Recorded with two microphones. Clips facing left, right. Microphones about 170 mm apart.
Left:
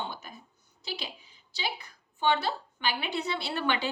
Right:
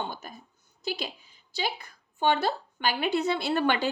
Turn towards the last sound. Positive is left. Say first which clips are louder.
# right 5 dB
turn(degrees=-45)  # may be behind; listen again after turning